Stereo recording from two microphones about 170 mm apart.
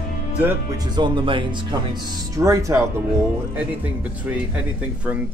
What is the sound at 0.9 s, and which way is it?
Speech, 30° right (ahead or behind).